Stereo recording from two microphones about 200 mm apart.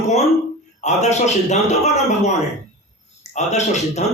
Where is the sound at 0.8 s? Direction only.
35° left (ahead or behind).